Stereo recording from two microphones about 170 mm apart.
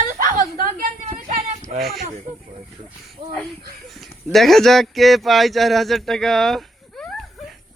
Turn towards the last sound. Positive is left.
turn(degrees=0)  # may be behind; listen again after turning